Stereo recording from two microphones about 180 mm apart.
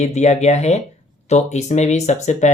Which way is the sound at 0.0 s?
40° left (ahead or behind).